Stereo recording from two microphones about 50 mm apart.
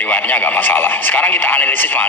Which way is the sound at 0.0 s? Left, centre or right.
Left.